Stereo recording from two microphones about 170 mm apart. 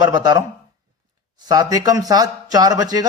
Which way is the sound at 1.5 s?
20° right (ahead or behind).